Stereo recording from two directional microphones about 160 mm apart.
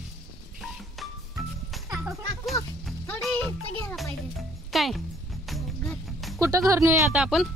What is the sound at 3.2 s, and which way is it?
Music, 5° left (ahead or behind).